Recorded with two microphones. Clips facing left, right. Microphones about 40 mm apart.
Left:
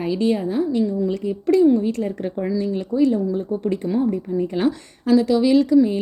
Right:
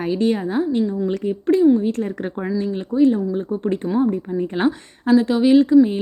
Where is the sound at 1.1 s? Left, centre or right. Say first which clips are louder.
Right 1 dB; right.